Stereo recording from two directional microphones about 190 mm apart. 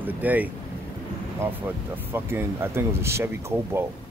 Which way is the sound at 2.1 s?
10° right (ahead or behind).